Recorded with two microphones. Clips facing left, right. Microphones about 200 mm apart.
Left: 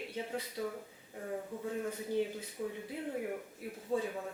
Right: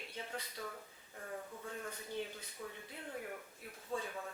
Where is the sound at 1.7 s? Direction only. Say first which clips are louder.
Left 9 dB; 10° left (ahead or behind).